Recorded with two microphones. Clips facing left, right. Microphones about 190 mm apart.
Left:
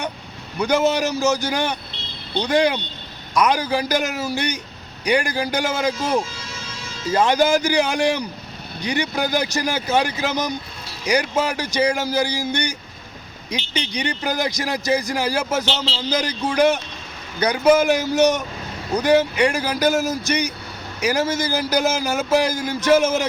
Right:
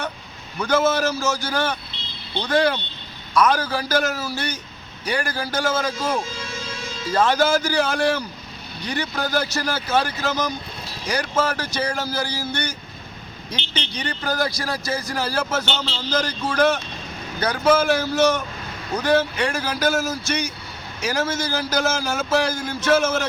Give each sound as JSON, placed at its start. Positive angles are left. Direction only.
{"t": 0.6, "sound": "a man's voice", "side_deg": 15}